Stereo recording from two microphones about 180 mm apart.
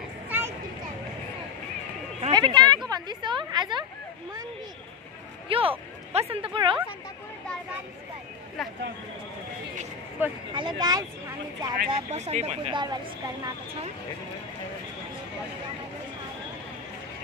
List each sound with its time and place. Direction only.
0.3 s a sound: 10° right (ahead or behind)
2.3 s a sound: 25° right (ahead or behind)
5.5 s speech: 30° right (ahead or behind)
8.6 s speech: centre (ahead or behind)
10.2 s speech: 10° right (ahead or behind)
10.5 s speech: 25° right (ahead or behind)
11.9 s speech: 35° right (ahead or behind)
12.7 s speech: 25° right (ahead or behind)